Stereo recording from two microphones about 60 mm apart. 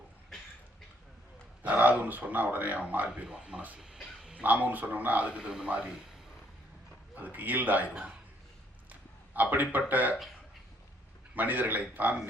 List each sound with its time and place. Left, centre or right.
1.6 s a man's voice: right
3.8 s a sound: centre
4.4 s a man's voice: right
7.2 s a man's voice: right
8.9 s a sound: right
9.7 s a man's voice: right
11.3 s a man's voice: right